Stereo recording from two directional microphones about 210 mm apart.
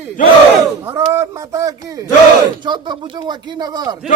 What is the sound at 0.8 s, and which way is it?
Speech, 10° right (ahead or behind).